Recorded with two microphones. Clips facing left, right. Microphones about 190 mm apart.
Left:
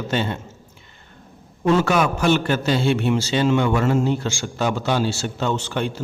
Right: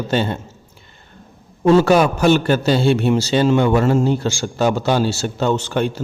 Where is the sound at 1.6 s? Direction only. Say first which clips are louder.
Right 6 dB; 35° right (ahead or behind).